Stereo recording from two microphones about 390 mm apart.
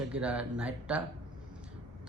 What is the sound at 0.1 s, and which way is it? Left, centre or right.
Speech, centre.